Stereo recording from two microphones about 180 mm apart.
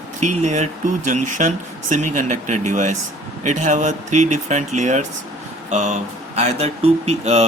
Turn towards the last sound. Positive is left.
turn(degrees=-35)  # may be behind; listen again after turning